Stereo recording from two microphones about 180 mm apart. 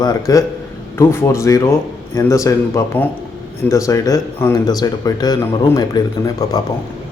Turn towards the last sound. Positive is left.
turn(degrees=20)  # may be behind; listen again after turning